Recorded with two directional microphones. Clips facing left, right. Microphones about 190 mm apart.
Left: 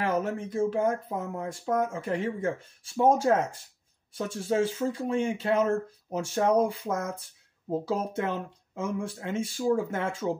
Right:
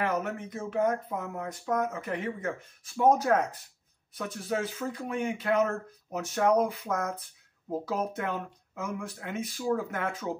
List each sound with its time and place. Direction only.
0.0 s speech: 30° left (ahead or behind)